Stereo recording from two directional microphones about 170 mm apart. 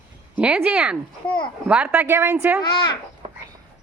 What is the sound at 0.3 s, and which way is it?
A woman's voice, 5° right (ahead or behind).